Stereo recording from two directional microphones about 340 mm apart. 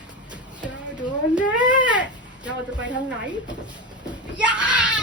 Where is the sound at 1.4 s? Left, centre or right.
Centre.